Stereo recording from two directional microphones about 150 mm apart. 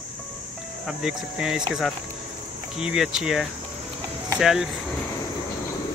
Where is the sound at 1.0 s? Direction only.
5° right (ahead or behind).